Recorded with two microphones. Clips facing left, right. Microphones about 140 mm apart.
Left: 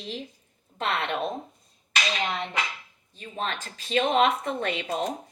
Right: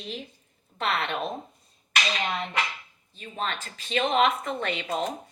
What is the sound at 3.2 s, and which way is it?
A woman's voice, 35° left (ahead or behind).